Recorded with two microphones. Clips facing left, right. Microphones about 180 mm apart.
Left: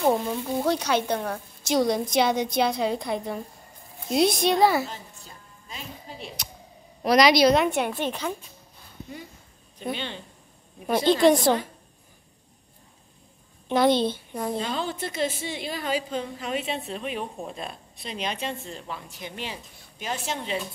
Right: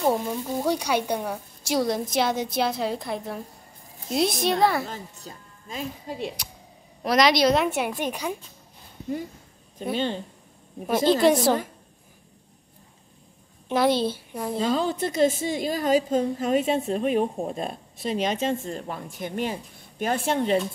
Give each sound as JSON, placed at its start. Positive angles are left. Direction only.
{"t": 0.0, "sound": "a woman's voice", "side_deg": -5}
{"t": 4.8, "sound": "a woman's voice", "side_deg": -45}
{"t": 7.0, "sound": "a woman's voice", "side_deg": 0}
{"t": 9.9, "sound": "a woman's voice", "side_deg": -40}
{"t": 10.9, "sound": "a woman's voice", "side_deg": -5}
{"t": 13.7, "sound": "a woman's voice", "side_deg": -5}
{"t": 14.6, "sound": "a woman's voice", "side_deg": -40}